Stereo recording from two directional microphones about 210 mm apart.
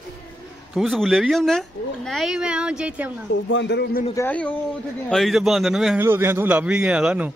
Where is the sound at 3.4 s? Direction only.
60° left (ahead or behind).